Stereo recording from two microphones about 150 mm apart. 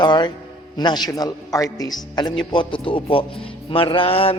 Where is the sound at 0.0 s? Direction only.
30° left (ahead or behind).